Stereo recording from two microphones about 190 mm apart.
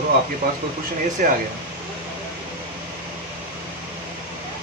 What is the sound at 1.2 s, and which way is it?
Speech, 45° right (ahead or behind).